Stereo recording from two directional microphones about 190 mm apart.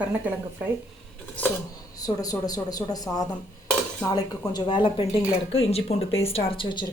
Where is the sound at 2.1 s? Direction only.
20° left (ahead or behind).